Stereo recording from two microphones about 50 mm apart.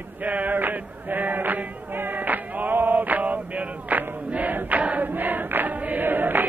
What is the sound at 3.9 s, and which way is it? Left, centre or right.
Choir, right.